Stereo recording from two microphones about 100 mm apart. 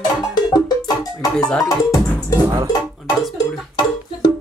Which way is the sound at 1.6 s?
35° left (ahead or behind).